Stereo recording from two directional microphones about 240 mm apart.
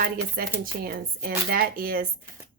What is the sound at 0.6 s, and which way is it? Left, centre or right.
A woman's voice, right.